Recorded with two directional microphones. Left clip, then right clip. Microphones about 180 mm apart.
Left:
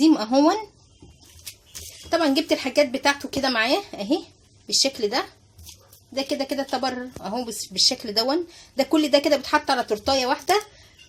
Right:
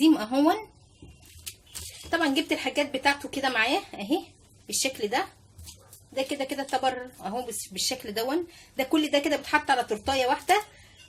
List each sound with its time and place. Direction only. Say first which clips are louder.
0.0 s speech: left 4 dB; 45° left (ahead or behind)
2.0 s speech: left 5 dB; 45° left (ahead or behind)
6.2 s speech: left 5 dB; 45° left (ahead or behind)